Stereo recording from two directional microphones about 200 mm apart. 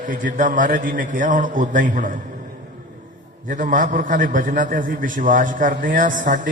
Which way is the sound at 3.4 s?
40° right (ahead or behind).